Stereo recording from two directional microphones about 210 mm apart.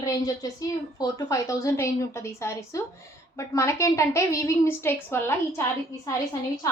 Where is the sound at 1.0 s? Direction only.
15° left (ahead or behind).